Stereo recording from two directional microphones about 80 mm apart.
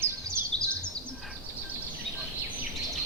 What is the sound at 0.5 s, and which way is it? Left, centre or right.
Bird vocalization, centre.